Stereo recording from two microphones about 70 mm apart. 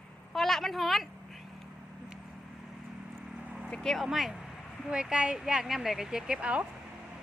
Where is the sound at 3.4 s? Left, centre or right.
Right.